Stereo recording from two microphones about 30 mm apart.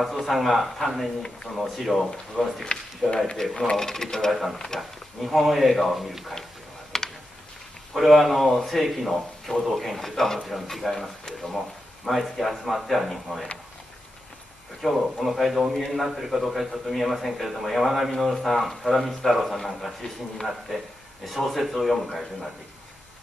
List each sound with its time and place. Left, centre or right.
0.0 s a man's voice: centre
3.0 s speech: left
3.7 s a man's voice: centre
4.7 s a man's voice: centre
6.9 s a sound: centre
7.9 s a man's voice: centre
10.4 s a man's voice: centre
14.9 s a man's voice: centre